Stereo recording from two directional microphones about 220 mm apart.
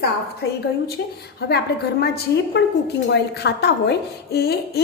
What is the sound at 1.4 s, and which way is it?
A woman's voice, 45° left (ahead or behind).